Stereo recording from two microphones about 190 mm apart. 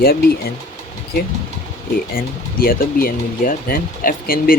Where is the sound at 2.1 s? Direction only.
50° left (ahead or behind).